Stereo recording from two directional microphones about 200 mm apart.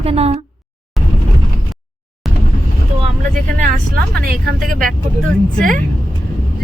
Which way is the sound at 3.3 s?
40° right (ahead or behind).